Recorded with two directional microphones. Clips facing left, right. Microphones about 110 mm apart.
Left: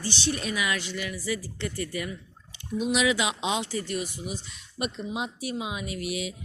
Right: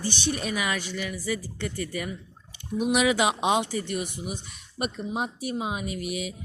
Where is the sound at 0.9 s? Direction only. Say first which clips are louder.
Right 1 dB; 15° right (ahead or behind).